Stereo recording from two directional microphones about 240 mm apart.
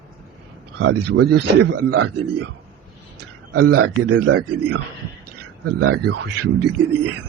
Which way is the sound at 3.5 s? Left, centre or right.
Right.